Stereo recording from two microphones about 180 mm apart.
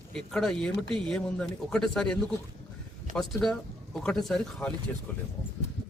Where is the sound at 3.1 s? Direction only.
Centre (ahead or behind).